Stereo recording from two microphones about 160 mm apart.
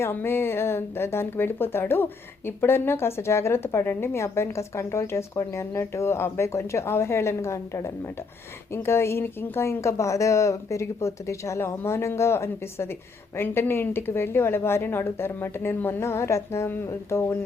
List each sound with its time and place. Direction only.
0.0 s speech: 15° left (ahead or behind)